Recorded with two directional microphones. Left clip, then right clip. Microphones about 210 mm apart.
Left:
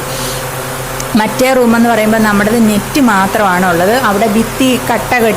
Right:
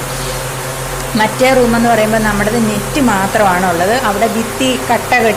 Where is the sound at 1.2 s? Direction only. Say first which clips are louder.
Even; 30° left (ahead or behind).